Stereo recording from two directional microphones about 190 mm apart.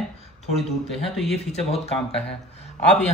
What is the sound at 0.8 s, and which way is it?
Speech, centre (ahead or behind).